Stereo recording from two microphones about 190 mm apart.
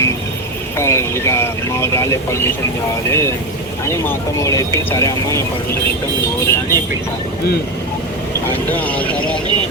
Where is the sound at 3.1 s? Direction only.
15° left (ahead or behind).